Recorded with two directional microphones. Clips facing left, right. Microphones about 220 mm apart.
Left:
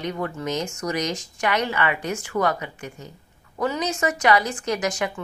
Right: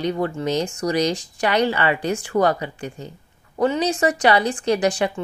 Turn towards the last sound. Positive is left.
turn(degrees=-30)  # may be behind; listen again after turning